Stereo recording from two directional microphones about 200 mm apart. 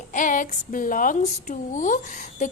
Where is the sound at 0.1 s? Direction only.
40° left (ahead or behind).